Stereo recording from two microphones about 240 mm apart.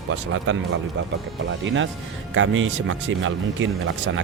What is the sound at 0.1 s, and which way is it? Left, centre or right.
Speech, right.